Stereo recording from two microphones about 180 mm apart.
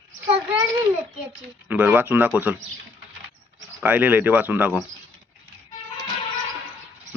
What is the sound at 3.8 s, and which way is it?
Speech, 10° right (ahead or behind).